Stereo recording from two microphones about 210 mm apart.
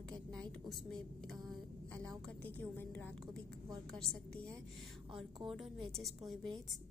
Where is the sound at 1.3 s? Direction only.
20° right (ahead or behind).